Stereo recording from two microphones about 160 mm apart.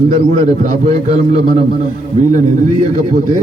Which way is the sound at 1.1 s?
45° right (ahead or behind).